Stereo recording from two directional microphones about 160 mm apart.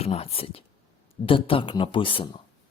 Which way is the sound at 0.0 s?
40° left (ahead or behind).